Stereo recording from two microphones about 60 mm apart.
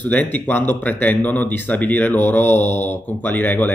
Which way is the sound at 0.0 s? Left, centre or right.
Left.